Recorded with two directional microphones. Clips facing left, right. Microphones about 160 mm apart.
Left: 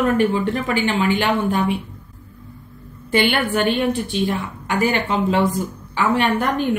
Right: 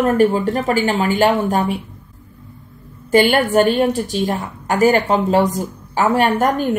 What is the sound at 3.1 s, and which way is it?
A woman's voice, 40° right (ahead or behind).